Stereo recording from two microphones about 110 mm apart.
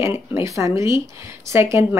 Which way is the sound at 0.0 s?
25° right (ahead or behind).